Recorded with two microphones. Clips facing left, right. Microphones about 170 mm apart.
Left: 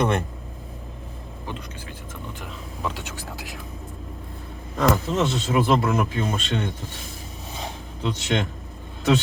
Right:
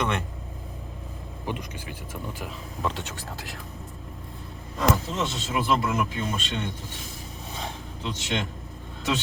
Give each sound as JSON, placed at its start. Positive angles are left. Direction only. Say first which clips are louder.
{"t": 0.0, "sound": "speech", "louder": "left 5 dB", "side_deg": 40}
{"t": 1.5, "sound": "speech", "louder": "right 3 dB", "side_deg": -15}
{"t": 2.4, "sound": "speech", "louder": "even", "side_deg": 0}
{"t": 4.8, "sound": "speech", "louder": "left 4 dB", "side_deg": 60}
{"t": 8.0, "sound": "speech", "louder": "left 5 dB", "side_deg": 60}